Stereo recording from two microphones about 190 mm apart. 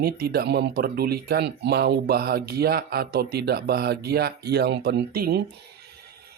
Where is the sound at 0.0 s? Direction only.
55° right (ahead or behind).